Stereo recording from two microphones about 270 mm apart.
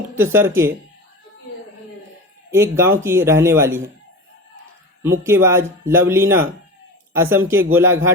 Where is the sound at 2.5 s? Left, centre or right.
Centre.